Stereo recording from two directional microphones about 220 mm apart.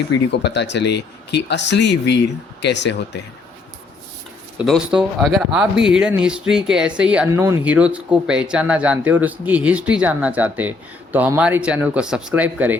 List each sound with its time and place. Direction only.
0.3 s speech: 50° left (ahead or behind)
4.5 s speech: centre (ahead or behind)